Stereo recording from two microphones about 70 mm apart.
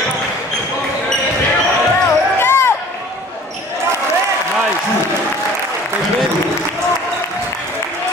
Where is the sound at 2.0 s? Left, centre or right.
Left.